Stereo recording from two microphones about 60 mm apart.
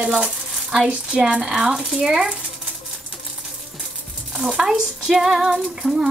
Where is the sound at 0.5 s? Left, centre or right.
Centre.